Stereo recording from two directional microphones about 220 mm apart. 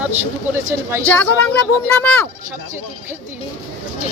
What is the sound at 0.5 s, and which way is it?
Speech, 10° right (ahead or behind).